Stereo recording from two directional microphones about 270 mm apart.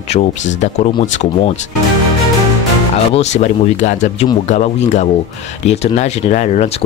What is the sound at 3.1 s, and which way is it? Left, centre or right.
Speech, left.